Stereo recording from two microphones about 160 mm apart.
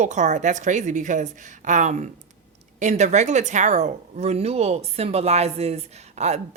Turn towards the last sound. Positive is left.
turn(degrees=-45)  # may be behind; listen again after turning